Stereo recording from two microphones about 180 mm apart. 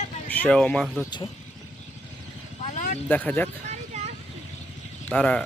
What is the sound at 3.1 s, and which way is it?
Speech, 10° left (ahead or behind).